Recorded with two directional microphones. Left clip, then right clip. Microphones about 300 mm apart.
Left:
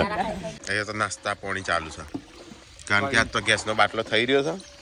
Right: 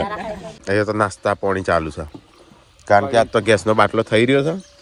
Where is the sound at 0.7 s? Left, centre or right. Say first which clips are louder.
Right 9 dB; centre.